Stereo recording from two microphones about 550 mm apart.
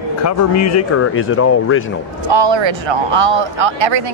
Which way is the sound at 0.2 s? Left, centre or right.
Left.